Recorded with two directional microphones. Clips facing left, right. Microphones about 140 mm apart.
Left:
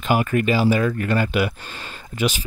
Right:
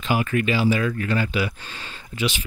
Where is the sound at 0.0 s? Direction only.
45° left (ahead or behind).